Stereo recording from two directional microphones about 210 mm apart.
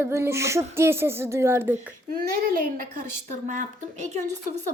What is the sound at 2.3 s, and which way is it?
A woman's voice, 45° right (ahead or behind).